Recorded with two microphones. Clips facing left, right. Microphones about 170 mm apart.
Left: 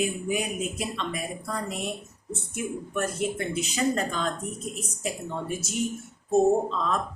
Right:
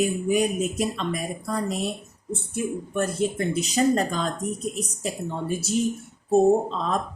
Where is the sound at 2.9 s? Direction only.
35° right (ahead or behind).